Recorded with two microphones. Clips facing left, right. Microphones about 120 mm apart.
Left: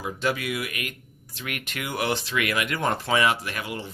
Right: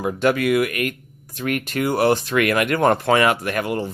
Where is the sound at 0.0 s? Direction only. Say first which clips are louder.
Right 8 dB; 55° right (ahead or behind).